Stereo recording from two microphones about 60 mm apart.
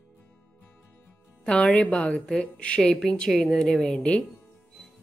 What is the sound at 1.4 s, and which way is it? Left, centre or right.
Speech, centre.